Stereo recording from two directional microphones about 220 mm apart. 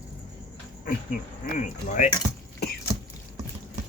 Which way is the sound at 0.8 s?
40° left (ahead or behind).